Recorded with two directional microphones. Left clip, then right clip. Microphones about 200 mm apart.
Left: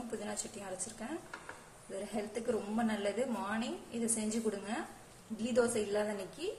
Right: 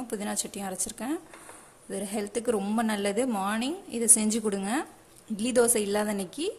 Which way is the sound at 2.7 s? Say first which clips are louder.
Right 7 dB; 55° right (ahead or behind).